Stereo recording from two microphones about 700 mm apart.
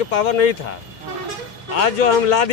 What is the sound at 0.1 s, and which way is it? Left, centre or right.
Speech, left.